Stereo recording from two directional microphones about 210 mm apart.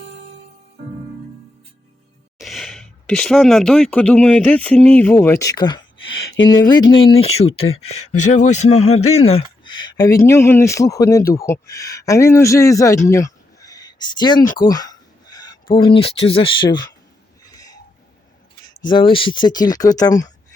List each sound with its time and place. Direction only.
2.4 s speech: centre (ahead or behind); by 9.0 s 30° left (ahead or behind)
9.1 s a sound: 30° left (ahead or behind)
10.0 s speech: 15° left (ahead or behind)
13.1 s a sound: 15° left (ahead or behind)
14.5 s speech: 20° left (ahead or behind)
18.6 s speech: 20° left (ahead or behind)